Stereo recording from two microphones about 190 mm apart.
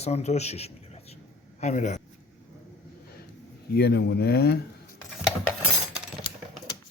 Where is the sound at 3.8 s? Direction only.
55° left (ahead or behind).